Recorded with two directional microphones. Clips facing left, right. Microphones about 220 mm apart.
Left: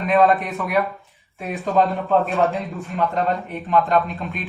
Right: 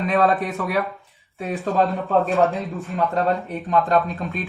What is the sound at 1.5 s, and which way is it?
A man's voice, centre (ahead or behind).